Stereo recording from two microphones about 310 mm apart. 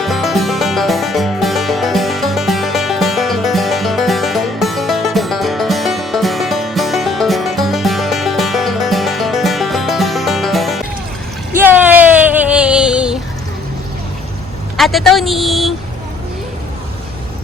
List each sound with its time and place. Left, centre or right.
0.0 s music: centre
11.5 s a sound: centre
14.8 s a woman's voice: centre